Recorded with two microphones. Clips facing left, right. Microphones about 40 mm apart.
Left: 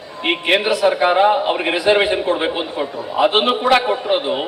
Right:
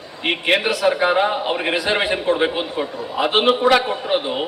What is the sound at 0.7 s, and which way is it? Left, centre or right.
A man's voice, centre.